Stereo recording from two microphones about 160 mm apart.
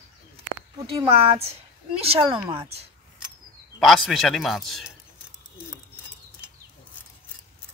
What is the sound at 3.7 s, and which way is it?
A woman's voice, centre (ahead or behind).